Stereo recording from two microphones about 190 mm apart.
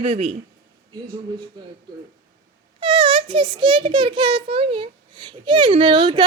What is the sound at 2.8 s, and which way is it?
A child's voice, 25° right (ahead or behind).